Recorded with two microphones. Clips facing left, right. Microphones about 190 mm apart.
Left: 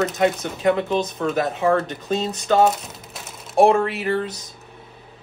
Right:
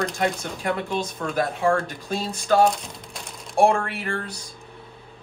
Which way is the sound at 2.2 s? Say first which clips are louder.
Left 1 dB; 20° left (ahead or behind).